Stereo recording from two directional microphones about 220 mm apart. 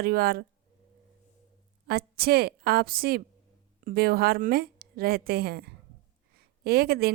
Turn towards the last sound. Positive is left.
turn(degrees=-45)  # may be behind; listen again after turning